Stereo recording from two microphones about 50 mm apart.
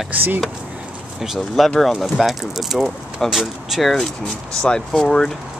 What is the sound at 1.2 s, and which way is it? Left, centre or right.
Speech, centre.